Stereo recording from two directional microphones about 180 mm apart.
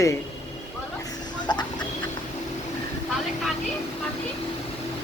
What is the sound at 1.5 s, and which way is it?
Duck, 25° left (ahead or behind).